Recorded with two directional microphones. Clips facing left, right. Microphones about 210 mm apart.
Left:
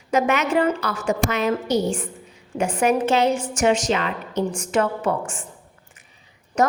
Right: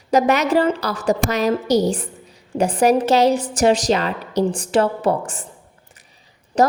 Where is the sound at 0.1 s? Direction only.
35° right (ahead or behind).